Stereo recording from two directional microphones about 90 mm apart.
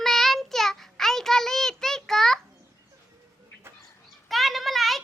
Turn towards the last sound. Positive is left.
turn(degrees=0)  # may be behind; listen again after turning